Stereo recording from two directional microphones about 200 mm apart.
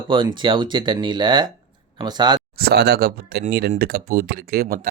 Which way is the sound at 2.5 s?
55° right (ahead or behind).